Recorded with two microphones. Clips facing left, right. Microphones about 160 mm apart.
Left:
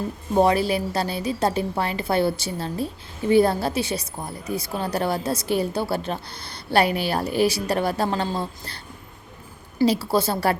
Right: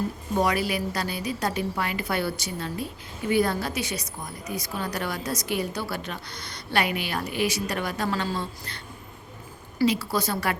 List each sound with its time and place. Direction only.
0.3 s a woman's voice: 30° left (ahead or behind)
9.8 s a woman's voice: 30° left (ahead or behind)